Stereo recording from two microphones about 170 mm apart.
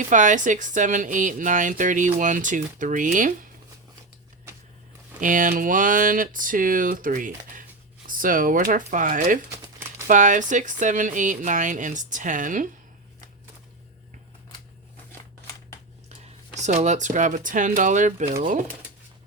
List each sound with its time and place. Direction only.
0.1 s speech: 50° right (ahead or behind)
5.2 s speech: 50° right (ahead or behind)
16.6 s speech: 45° right (ahead or behind)